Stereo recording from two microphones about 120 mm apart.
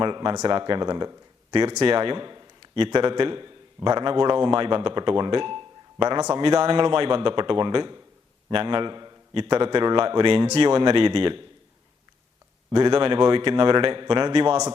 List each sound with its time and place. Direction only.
0.0 s speech: 45° right (ahead or behind)
1.7 s a man's voice: 50° right (ahead or behind)
6.4 s a man's voice: 50° right (ahead or behind)
12.7 s a man's voice: 40° right (ahead or behind)